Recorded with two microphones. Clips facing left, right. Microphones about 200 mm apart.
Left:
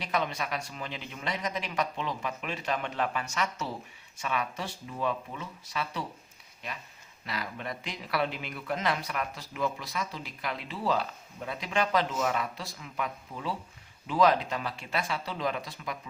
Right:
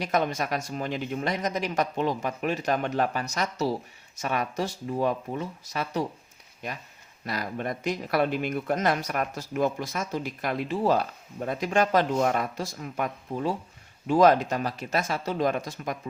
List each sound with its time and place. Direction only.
0.0 s speech: 45° right (ahead or behind)
7.3 s speech: 45° right (ahead or behind)